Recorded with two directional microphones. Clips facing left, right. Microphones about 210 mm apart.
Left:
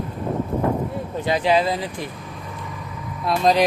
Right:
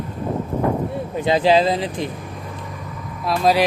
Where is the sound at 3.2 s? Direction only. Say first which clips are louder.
Right 1 dB; 5° right (ahead or behind).